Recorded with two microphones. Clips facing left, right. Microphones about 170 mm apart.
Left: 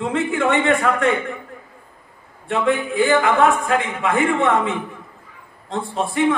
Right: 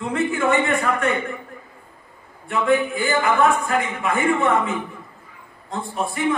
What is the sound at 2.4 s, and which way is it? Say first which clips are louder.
A man's voice: even; 80° left.